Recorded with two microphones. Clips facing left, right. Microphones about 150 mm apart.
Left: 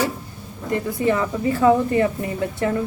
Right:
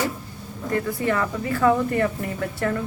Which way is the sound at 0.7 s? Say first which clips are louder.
Left 3 dB; 20° left (ahead or behind).